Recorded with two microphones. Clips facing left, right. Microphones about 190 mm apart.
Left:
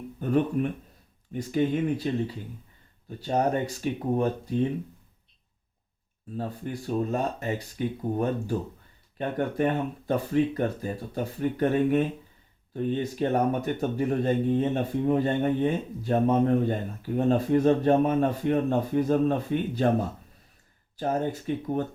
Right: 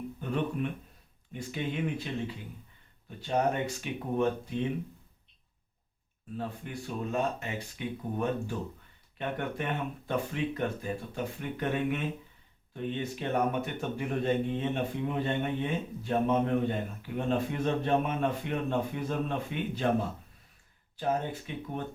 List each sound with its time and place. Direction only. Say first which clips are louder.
0.2 s speech: left 8 dB; 45° left (ahead or behind)
3.2 s speech: left 3 dB; 40° left (ahead or behind)
6.3 s speech: left 4 dB; 35° left (ahead or behind)